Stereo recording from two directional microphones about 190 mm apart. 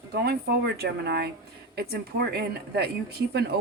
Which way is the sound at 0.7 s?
60° right (ahead or behind).